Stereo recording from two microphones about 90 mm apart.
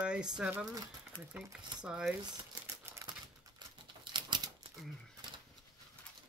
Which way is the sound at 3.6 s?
55° right (ahead or behind).